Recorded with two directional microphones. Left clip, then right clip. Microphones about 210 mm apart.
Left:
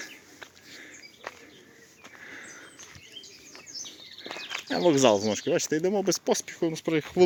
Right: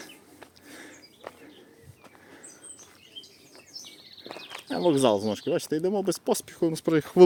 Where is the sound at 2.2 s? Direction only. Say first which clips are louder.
Left 8 dB; 5° right (ahead or behind).